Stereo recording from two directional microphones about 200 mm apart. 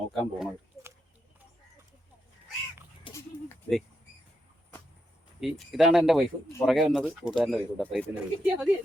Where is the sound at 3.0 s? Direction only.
15° left (ahead or behind).